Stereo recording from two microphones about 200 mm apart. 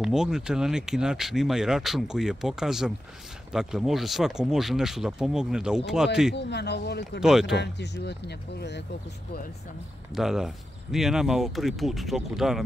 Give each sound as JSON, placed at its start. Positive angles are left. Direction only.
{"t": 0.0, "sound": "speech", "side_deg": -5}
{"t": 6.3, "sound": "speech", "side_deg": 60}
{"t": 7.2, "sound": "speech", "side_deg": 0}
{"t": 7.5, "sound": "speech", "side_deg": 60}
{"t": 10.1, "sound": "speech", "side_deg": 0}